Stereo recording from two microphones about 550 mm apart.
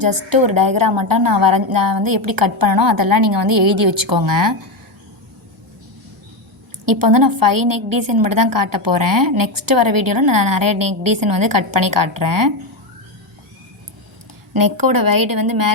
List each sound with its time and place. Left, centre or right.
0.0 s a woman's voice: right
6.8 s a woman's voice: right
14.6 s a woman's voice: right